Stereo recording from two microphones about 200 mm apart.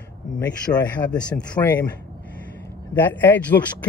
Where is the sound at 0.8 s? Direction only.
5° left (ahead or behind).